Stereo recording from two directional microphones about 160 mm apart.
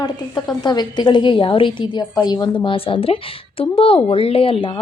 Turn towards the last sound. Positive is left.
turn(degrees=35)  # may be behind; listen again after turning